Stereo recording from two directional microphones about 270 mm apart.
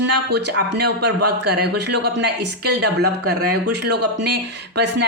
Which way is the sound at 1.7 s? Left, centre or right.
Right.